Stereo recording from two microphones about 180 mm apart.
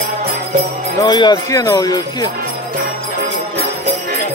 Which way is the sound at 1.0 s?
25° left (ahead or behind).